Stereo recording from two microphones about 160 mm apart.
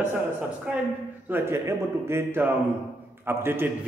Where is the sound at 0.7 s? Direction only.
5° right (ahead or behind).